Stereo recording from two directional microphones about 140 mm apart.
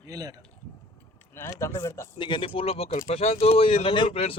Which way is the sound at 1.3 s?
15° left (ahead or behind).